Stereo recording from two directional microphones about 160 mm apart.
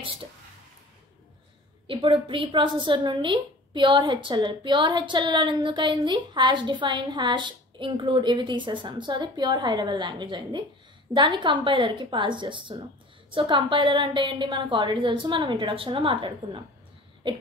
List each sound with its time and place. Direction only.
1.9 s a woman's voice: 35° right (ahead or behind)